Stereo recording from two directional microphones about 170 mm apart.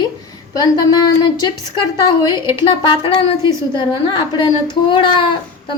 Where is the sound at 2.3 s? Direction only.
25° left (ahead or behind).